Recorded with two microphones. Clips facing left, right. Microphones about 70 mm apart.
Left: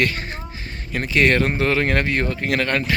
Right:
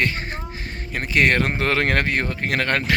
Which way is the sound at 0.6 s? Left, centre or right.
Right.